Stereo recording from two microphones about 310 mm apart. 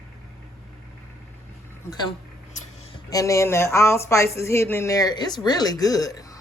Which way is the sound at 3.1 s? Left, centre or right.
Centre.